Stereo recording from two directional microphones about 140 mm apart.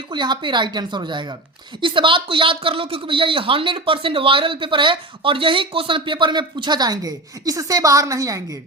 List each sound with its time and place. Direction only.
0.1 s speech: 35° right (ahead or behind)